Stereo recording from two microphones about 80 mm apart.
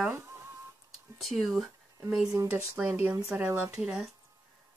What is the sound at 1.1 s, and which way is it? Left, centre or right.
Speech, centre.